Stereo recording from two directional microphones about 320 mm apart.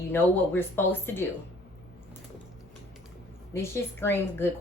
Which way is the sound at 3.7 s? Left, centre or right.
Centre.